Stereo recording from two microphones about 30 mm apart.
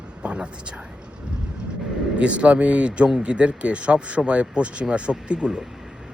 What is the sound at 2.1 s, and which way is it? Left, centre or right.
Speech, right.